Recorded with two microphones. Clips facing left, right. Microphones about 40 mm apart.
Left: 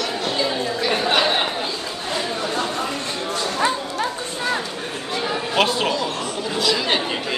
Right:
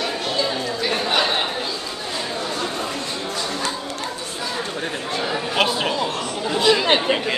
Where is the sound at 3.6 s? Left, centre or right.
Left.